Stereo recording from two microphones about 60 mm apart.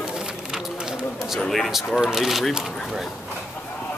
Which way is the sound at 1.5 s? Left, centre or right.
Centre.